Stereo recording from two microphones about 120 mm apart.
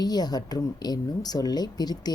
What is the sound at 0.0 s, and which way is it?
Speech, 35° left (ahead or behind).